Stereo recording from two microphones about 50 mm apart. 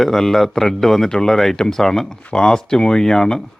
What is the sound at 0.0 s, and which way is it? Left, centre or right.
Speech, centre.